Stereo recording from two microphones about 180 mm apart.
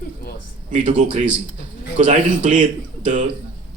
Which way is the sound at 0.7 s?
40° right (ahead or behind).